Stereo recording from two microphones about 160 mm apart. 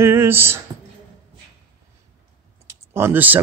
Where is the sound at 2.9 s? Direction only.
15° right (ahead or behind).